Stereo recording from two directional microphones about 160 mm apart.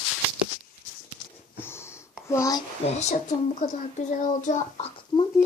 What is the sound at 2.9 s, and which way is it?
A child's voice, 45° left (ahead or behind).